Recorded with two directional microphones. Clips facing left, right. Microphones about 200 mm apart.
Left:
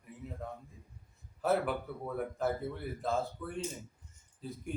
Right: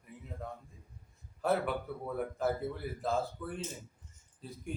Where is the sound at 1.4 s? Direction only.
Centre (ahead or behind).